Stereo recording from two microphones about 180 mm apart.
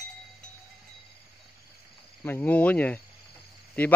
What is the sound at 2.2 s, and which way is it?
Cricket, 10° left (ahead or behind).